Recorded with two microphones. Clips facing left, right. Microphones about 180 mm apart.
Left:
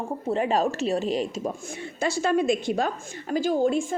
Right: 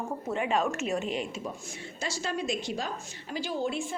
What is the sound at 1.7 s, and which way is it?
A woman's voice, 55° left (ahead or behind).